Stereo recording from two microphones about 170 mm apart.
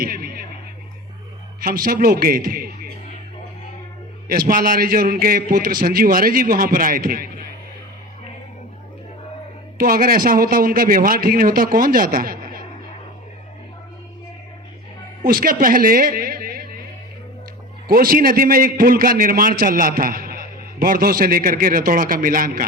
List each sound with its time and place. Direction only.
0.0 s music: 60° right (ahead or behind)
1.6 s a man's voice: 60° right (ahead or behind)
4.3 s a man's voice: 55° right (ahead or behind)
9.7 s a man's voice: 55° right (ahead or behind)
15.2 s a woman's voice: 55° right (ahead or behind)
17.8 s a man's voice: 55° right (ahead or behind)